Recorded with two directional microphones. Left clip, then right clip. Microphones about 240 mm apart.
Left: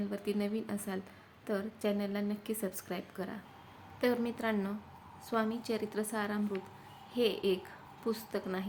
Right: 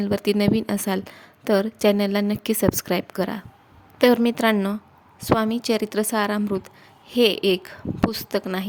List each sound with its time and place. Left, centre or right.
0.0 s a woman's voice: right